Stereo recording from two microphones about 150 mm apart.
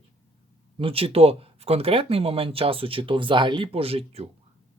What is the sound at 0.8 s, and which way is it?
Speech, 40° right (ahead or behind).